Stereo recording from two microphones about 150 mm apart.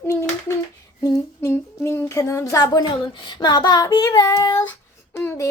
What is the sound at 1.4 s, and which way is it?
Child singing, 15° left (ahead or behind).